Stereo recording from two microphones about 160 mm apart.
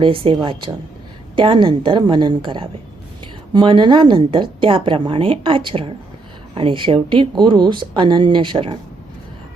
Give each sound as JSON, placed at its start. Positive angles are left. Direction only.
{"t": 0.0, "sound": "speech", "side_deg": -35}
{"t": 1.4, "sound": "speech", "side_deg": -30}